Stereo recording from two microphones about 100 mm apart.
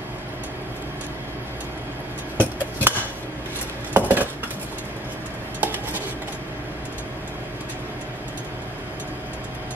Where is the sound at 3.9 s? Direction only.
15° right (ahead or behind).